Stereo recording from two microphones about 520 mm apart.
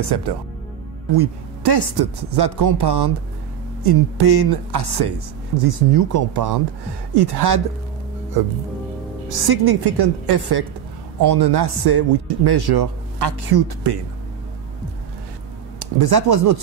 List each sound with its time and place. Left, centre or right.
0.0 s speech: right
15.8 s speech: right